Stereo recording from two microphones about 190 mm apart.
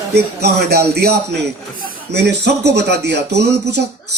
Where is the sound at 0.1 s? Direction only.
55° right (ahead or behind).